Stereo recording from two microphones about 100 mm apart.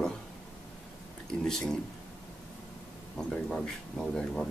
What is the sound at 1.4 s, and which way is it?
Speech, 5° left (ahead or behind).